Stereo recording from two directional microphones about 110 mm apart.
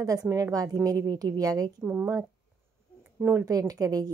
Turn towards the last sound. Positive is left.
turn(degrees=-35)  # may be behind; listen again after turning